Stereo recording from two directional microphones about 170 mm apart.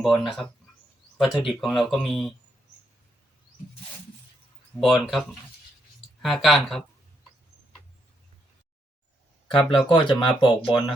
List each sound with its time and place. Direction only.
0.0 s speech: centre (ahead or behind)
4.8 s speech: centre (ahead or behind)
6.2 s speech: centre (ahead or behind)
9.5 s speech: 30° left (ahead or behind)